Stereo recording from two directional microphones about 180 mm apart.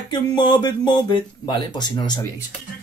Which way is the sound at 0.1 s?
25° left (ahead or behind).